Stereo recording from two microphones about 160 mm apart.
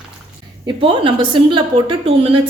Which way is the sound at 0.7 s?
30° right (ahead or behind).